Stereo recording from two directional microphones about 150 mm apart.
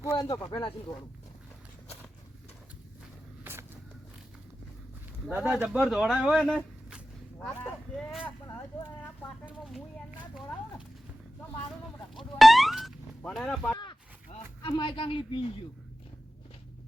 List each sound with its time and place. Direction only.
0.0 s speech: 20° left (ahead or behind)
3.4 s vehicle: 15° right (ahead or behind)
5.3 s speech: 5° right (ahead or behind)
8.4 s speech: 20° left (ahead or behind)
12.1 s a sound: centre (ahead or behind)
14.6 s speech: 35° left (ahead or behind)